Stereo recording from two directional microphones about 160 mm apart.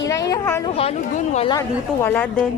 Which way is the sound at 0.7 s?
40° left (ahead or behind).